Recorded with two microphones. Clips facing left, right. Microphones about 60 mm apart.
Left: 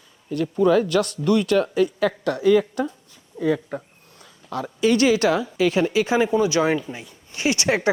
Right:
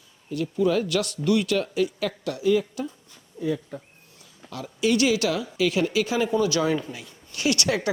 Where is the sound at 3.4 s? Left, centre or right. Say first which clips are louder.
Left 5 dB; left.